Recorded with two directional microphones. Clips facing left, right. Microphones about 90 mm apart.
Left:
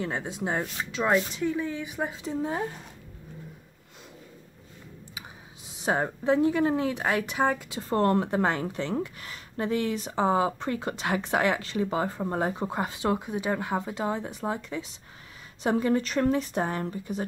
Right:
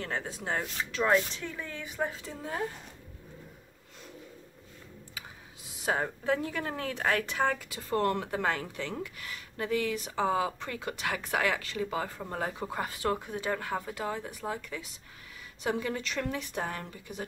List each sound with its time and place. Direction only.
0.0 s speech: 20° left (ahead or behind)
5.8 s speech: 25° left (ahead or behind)